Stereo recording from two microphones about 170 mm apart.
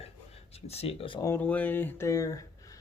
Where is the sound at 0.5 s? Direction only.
35° left (ahead or behind).